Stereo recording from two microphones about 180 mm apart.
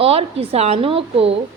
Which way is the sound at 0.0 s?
35° right (ahead or behind).